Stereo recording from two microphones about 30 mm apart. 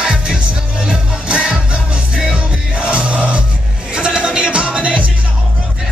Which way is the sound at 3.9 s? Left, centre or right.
Right.